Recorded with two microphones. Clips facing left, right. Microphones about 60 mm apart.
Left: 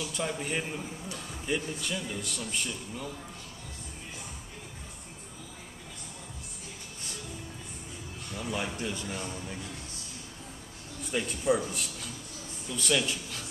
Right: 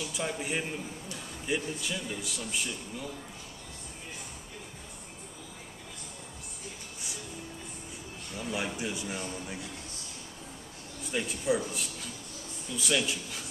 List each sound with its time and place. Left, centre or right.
0.0 s a man's voice: centre
8.4 s a man's voice: centre
11.1 s a man's voice: centre